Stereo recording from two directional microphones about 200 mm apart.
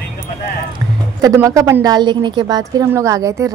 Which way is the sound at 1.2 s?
15° right (ahead or behind).